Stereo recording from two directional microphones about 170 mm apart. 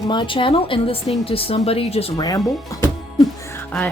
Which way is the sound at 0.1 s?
30° left (ahead or behind).